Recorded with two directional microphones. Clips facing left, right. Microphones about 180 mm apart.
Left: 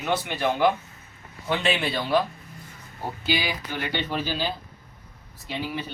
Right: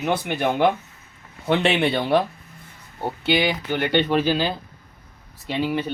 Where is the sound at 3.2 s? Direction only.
70° right (ahead or behind).